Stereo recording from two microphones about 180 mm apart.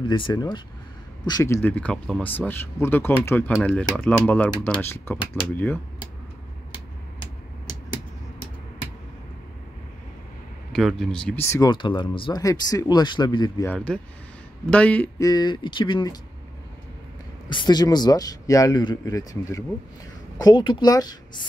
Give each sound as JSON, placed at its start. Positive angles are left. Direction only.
{"t": 0.0, "sound": "speech", "side_deg": 25}
{"t": 10.7, "sound": "speech", "side_deg": 0}
{"t": 11.7, "sound": "speech", "side_deg": 25}
{"t": 13.7, "sound": "speech", "side_deg": 5}
{"t": 15.2, "sound": "speech", "side_deg": 25}
{"t": 17.5, "sound": "speech", "side_deg": 25}